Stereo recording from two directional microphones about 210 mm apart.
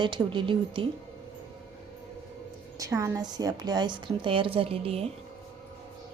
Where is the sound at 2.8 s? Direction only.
15° right (ahead or behind).